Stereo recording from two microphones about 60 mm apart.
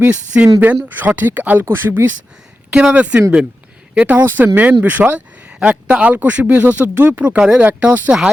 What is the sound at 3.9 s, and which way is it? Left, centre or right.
Speech, right.